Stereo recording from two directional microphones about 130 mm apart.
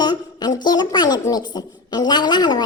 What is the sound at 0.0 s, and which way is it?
Speech, 30° left (ahead or behind).